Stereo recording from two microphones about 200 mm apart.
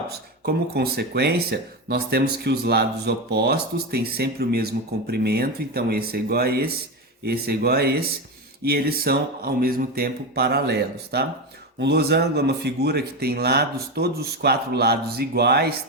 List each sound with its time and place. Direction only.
0.1 s speech: 50° right (ahead or behind)